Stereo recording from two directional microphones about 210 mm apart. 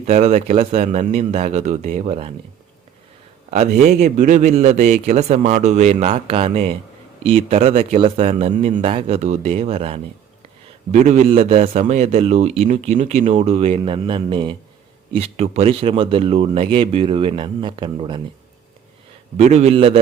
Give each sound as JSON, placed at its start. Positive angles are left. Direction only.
{"t": 0.0, "sound": "a man's voice", "side_deg": -30}
{"t": 3.5, "sound": "a man's voice", "side_deg": -35}
{"t": 19.4, "sound": "a man's voice", "side_deg": -30}